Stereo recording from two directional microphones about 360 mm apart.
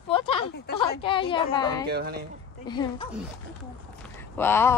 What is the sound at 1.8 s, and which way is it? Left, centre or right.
Speech, right.